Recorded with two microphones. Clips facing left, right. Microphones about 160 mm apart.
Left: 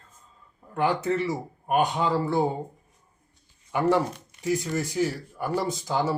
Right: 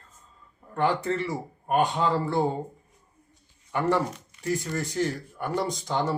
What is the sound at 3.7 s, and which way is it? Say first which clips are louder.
A man's voice: left 2 dB; 10° left (ahead or behind).